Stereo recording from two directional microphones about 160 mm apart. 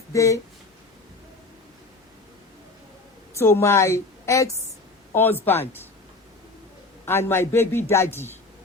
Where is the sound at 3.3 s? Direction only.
15° left (ahead or behind).